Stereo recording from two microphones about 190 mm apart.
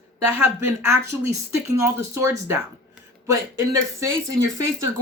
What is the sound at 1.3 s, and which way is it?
Speech, 15° right (ahead or behind).